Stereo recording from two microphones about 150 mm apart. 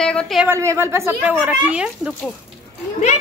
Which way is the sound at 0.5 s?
20° right (ahead or behind).